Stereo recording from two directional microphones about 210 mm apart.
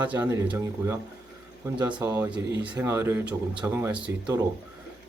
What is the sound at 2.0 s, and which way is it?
Speech, 10° right (ahead or behind).